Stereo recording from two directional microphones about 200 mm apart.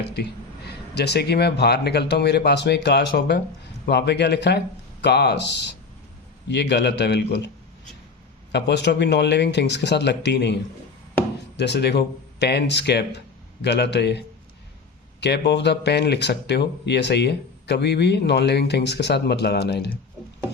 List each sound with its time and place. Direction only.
0.1 s speech: 55° left (ahead or behind)
8.5 s speech: 55° left (ahead or behind)